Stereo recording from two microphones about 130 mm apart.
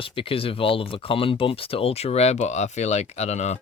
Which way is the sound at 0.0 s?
45° left (ahead or behind).